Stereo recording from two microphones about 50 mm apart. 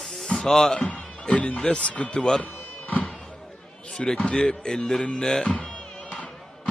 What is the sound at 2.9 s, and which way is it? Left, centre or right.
Music, left.